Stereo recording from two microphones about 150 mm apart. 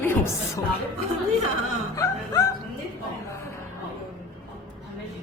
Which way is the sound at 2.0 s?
25° left (ahead or behind).